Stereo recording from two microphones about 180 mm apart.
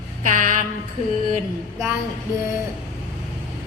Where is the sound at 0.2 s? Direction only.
45° right (ahead or behind).